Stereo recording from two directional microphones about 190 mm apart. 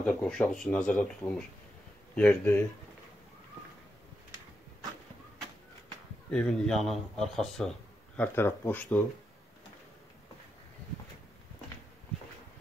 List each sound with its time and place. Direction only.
0.0 s speech: 5° left (ahead or behind)
6.3 s speech: 5° left (ahead or behind)